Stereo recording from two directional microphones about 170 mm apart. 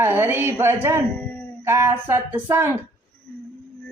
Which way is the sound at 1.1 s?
10° left (ahead or behind).